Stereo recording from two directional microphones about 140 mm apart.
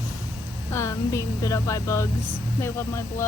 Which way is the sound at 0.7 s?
20° left (ahead or behind).